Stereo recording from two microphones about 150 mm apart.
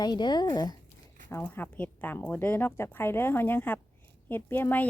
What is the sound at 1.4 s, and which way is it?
A woman's voice, 10° left (ahead or behind).